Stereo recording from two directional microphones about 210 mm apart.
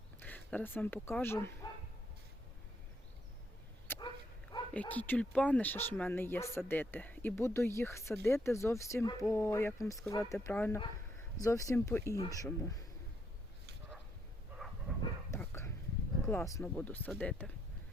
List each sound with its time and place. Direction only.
0.2 s speech: 10° left (ahead or behind)
3.9 s bow-wow: 10° left (ahead or behind)
4.7 s speech: 5° left (ahead or behind)
14.6 s train: centre (ahead or behind)
15.3 s dog: 10° left (ahead or behind)
16.2 s speech: 10° left (ahead or behind)